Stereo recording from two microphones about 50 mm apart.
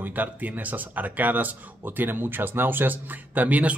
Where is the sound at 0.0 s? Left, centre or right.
Right.